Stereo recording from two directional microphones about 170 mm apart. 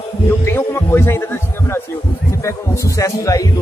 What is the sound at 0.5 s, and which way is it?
Speech, 15° left (ahead or behind).